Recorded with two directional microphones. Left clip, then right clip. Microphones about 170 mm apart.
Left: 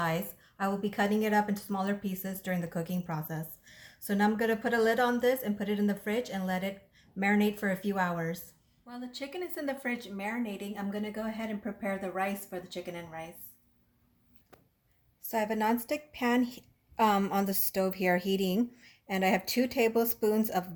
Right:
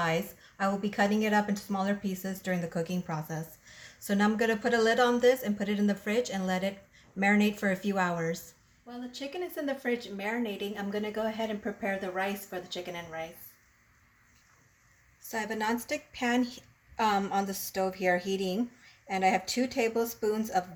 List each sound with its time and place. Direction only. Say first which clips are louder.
0.0 s a woman's voice: right 2 dB; centre (ahead or behind)
15.3 s a woman's voice: left 2 dB; 35° left (ahead or behind)